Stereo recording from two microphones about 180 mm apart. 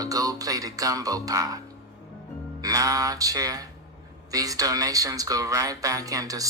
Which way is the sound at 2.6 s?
20° right (ahead or behind).